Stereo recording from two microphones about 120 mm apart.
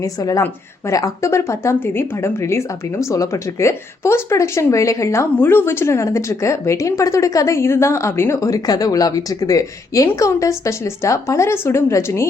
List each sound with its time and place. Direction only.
0.0 s speech: 30° left (ahead or behind)